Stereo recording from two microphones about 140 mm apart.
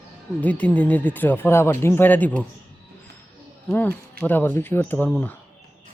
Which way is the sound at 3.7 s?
10° left (ahead or behind).